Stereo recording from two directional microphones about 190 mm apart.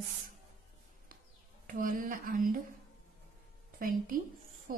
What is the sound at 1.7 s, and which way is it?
Speech, 45° right (ahead or behind).